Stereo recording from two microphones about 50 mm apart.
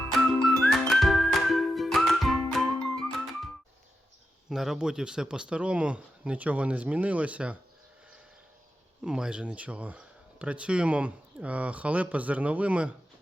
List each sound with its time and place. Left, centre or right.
0.3 s music: centre
4.4 s speech: centre; by 7.6 s right
9.0 s speech: centre